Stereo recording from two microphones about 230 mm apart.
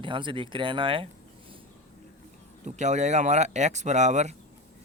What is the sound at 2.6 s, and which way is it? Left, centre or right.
Speech, right.